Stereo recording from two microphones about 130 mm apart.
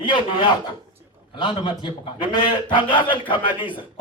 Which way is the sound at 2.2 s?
35° left (ahead or behind).